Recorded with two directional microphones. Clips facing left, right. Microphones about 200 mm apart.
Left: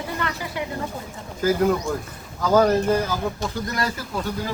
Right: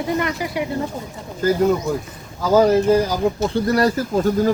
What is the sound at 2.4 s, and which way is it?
Speech, 10° right (ahead or behind).